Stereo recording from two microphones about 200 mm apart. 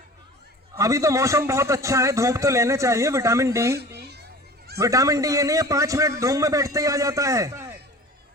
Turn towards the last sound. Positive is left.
turn(degrees=-15)  # may be behind; listen again after turning